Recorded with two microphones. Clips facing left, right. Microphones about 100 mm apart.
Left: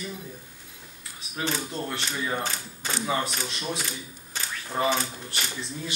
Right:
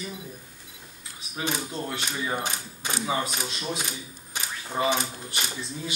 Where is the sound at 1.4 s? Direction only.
10° right (ahead or behind).